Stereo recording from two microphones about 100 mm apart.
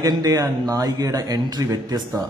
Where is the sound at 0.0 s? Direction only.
35° right (ahead or behind).